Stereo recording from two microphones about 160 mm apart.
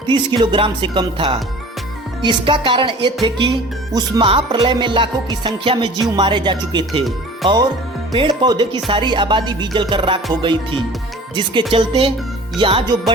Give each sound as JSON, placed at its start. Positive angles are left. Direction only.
{"t": 0.1, "sound": "speech", "side_deg": -30}
{"t": 3.2, "sound": "music", "side_deg": -30}
{"t": 9.9, "sound": "speech", "side_deg": -30}